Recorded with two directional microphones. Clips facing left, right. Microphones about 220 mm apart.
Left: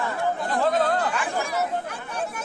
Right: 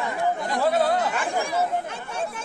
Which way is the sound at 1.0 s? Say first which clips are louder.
Right 1 dB; 20° right (ahead or behind).